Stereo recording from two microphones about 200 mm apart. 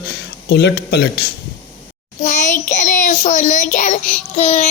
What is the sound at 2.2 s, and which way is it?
Child singing, 40° left (ahead or behind).